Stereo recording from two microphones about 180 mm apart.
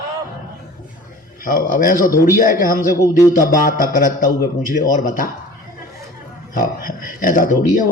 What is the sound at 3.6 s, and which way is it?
Speech, 50° left (ahead or behind).